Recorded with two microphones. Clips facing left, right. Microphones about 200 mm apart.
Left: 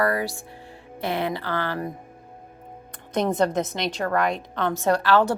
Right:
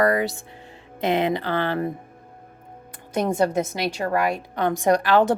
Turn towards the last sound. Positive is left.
turn(degrees=-15)  # may be behind; listen again after turning